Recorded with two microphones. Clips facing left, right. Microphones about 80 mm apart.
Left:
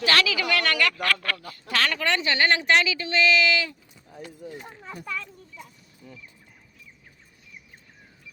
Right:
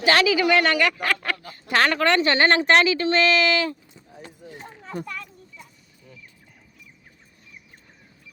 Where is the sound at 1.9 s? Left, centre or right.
Right.